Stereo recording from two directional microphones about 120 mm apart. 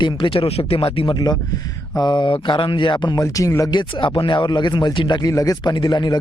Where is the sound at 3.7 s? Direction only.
40° left (ahead or behind).